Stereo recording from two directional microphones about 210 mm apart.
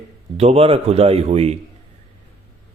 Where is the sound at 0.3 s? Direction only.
30° right (ahead or behind).